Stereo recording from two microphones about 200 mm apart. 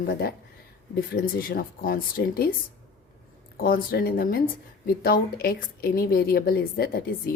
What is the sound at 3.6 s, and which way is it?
Speech, 45° left (ahead or behind).